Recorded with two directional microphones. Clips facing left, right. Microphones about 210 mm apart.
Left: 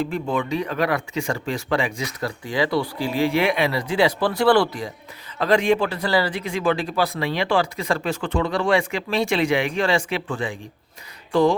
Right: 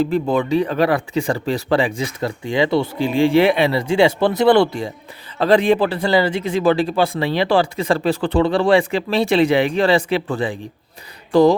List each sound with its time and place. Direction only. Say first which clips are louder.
0.0 s speech: right 6 dB; 35° right (ahead or behind)